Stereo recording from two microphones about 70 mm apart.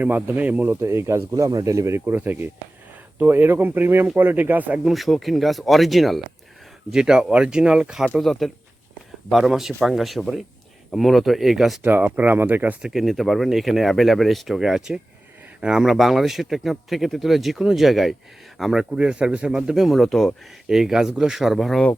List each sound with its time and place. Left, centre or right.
0.0 s speech: right
0.7 s speech: right
2.1 s speech: right
4.9 s speech: centre
6.9 s speech: centre
8.2 s speech: centre
11.8 s speech: right
12.8 s speech: centre
20.7 s speech: centre